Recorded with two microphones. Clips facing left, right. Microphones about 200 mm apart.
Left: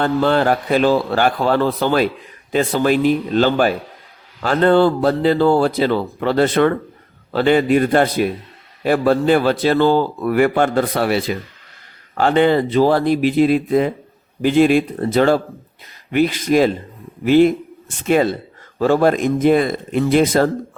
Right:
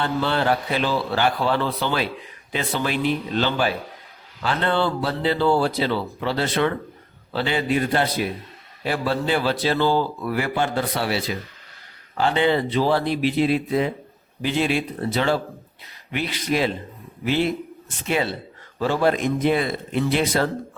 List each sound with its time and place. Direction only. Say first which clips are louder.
0.0 s a man's voice: left 7 dB; 50° left (ahead or behind)